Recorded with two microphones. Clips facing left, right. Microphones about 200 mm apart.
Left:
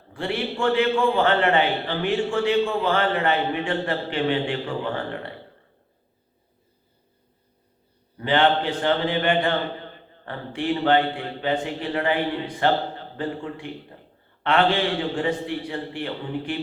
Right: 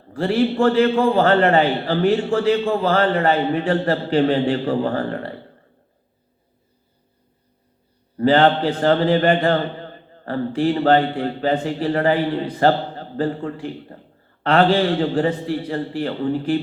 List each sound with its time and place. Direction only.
0.1 s a man's voice: 40° right (ahead or behind)
8.2 s a man's voice: 35° right (ahead or behind)
13.9 s a sound: 45° right (ahead or behind)
14.4 s a man's voice: 35° right (ahead or behind)